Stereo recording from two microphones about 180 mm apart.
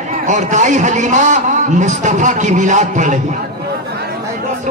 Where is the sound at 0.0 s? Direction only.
40° right (ahead or behind).